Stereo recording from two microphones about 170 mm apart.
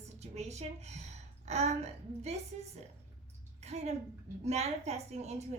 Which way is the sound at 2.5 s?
40° right (ahead or behind).